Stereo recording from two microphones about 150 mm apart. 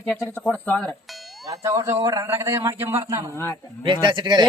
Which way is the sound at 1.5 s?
20° right (ahead or behind).